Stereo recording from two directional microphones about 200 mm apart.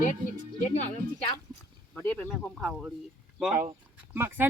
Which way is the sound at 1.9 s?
10° left (ahead or behind).